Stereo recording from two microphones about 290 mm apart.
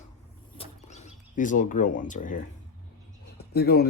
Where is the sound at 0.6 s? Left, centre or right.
Left.